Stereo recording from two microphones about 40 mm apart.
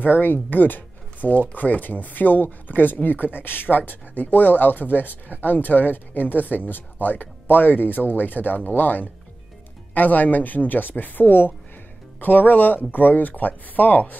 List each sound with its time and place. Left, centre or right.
0.0 s speech: left